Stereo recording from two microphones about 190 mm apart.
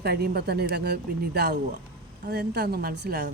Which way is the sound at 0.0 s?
55° right (ahead or behind).